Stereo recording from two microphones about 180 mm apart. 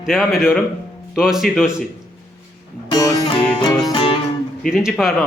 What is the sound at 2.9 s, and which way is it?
Music, 20° left (ahead or behind).